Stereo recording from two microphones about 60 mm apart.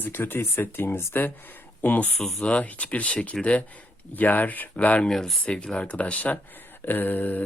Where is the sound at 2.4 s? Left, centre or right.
Left.